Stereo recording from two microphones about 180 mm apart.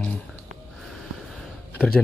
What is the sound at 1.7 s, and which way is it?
Speech, 5° left (ahead or behind).